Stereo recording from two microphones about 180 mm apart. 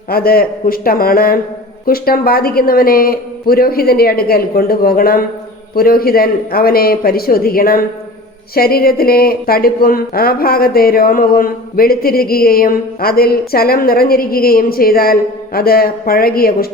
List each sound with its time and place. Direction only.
0.1 s speech: 55° left (ahead or behind)